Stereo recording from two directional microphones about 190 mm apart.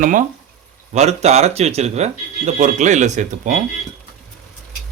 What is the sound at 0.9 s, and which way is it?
Speech, 35° right (ahead or behind).